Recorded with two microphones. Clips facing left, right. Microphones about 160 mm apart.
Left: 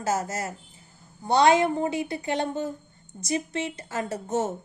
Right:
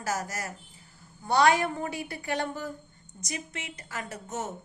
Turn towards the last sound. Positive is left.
turn(degrees=30)  # may be behind; listen again after turning